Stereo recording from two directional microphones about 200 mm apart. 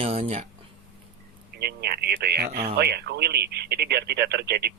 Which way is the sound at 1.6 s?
55° right (ahead or behind).